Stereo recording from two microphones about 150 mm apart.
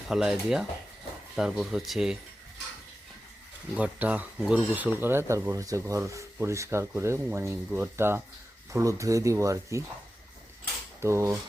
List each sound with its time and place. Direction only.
0.1 s speech: centre (ahead or behind)
3.8 s speech: 10° right (ahead or behind)
11.0 s speech: 20° right (ahead or behind)